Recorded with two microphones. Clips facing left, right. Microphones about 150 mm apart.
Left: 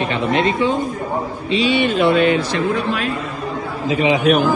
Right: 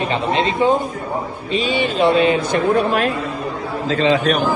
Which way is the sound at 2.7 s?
50° right (ahead or behind).